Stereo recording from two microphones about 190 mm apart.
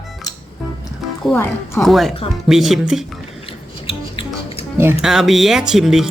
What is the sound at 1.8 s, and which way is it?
Speech, centre (ahead or behind).